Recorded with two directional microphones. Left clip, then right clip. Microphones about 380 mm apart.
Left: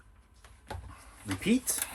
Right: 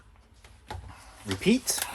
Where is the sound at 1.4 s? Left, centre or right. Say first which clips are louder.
Right 5 dB; centre.